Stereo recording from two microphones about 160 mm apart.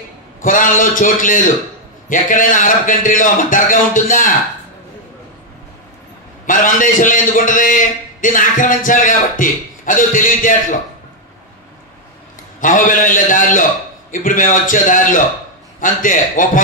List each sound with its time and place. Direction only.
0.4 s a man's voice: 55° left (ahead or behind)
6.4 s a man's voice: 55° left (ahead or behind)
12.5 s a man's voice: 55° left (ahead or behind)